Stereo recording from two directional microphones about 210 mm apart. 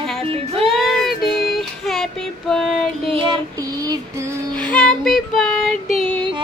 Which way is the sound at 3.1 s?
25° right (ahead or behind).